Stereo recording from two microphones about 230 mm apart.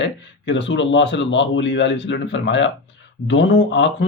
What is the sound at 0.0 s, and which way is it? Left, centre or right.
Speech, left.